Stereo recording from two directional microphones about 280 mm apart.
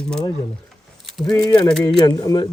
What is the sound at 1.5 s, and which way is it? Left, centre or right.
Speech, centre.